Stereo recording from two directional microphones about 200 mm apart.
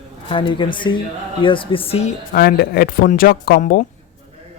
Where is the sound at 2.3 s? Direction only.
50° left (ahead or behind).